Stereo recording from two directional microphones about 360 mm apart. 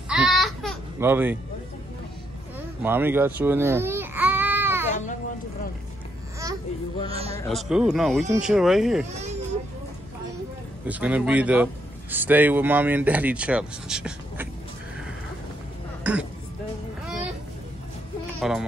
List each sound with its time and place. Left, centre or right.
0.1 s bleat: centre
2.8 s babbling: centre
7.1 s a sound: centre
7.4 s speech: centre
10.9 s a man's voice: centre
16.0 s music: centre
18.4 s speech: centre